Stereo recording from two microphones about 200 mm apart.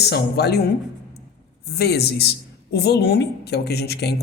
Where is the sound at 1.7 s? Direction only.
55° left (ahead or behind).